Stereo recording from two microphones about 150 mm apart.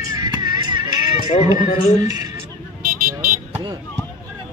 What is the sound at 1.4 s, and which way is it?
Speech, 25° right (ahead or behind).